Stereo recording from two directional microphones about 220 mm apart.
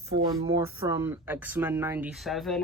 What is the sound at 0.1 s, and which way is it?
Speech, 15° right (ahead or behind).